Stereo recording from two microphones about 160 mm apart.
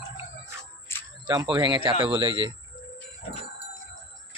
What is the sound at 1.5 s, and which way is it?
Speech, 30° right (ahead or behind).